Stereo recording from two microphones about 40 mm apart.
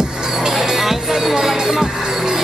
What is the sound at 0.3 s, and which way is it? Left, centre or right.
Music, centre.